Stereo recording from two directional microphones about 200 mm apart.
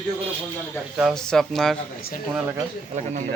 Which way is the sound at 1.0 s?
Centre (ahead or behind).